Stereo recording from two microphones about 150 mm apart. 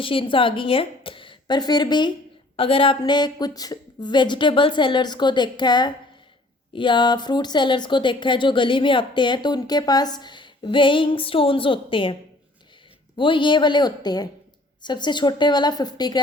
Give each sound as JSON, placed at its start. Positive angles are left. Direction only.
{"t": 0.0, "sound": "speech", "side_deg": 35}
{"t": 13.1, "sound": "a woman's voice", "side_deg": 35}